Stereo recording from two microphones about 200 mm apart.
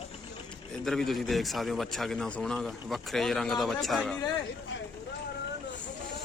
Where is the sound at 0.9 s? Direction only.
Centre (ahead or behind).